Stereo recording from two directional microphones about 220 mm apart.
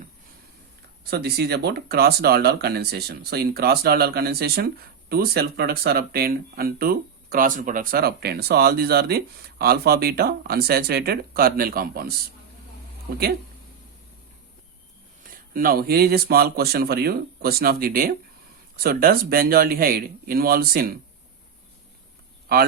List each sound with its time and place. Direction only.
1.1 s speech: 45° right (ahead or behind)
15.5 s speech: 40° right (ahead or behind)
22.5 s speech: 40° right (ahead or behind)